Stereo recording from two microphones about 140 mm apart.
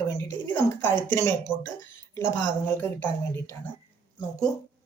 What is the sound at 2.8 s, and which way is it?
Speech, 15° left (ahead or behind).